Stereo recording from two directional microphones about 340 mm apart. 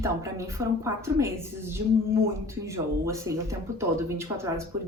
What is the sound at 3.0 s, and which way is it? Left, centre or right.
Speech, centre.